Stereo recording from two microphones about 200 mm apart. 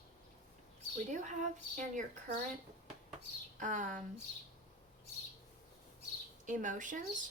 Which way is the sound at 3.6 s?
40° right (ahead or behind).